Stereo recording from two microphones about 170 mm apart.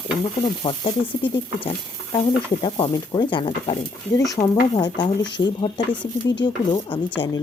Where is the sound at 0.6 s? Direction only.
30° left (ahead or behind).